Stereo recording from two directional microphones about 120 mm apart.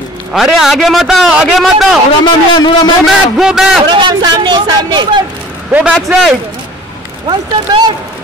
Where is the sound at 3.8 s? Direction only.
40° right (ahead or behind).